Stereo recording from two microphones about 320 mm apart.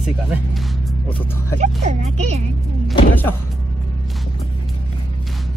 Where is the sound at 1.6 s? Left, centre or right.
Right.